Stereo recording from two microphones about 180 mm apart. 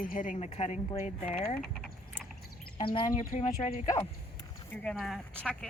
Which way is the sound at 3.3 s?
40° left (ahead or behind).